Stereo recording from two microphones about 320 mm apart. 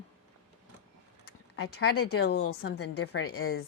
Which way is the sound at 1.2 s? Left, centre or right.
Left.